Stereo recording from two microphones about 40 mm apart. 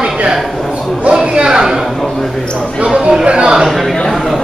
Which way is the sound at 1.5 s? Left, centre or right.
Centre.